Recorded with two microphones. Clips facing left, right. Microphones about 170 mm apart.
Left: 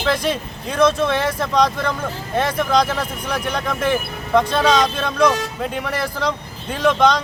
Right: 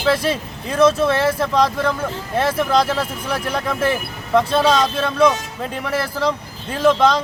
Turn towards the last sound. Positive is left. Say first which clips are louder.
# right 1 dB
turn(degrees=-5)  # may be behind; listen again after turning